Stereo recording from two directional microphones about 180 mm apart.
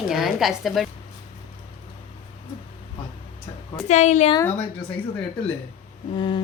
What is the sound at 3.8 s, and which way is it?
Speech, 40° left (ahead or behind).